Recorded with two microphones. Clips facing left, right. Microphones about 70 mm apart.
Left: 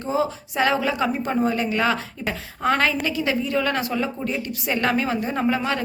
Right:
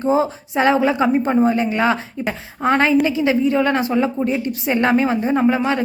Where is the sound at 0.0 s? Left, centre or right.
Right.